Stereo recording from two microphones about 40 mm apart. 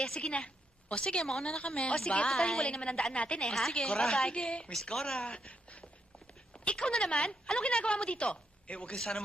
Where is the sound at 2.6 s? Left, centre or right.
Left.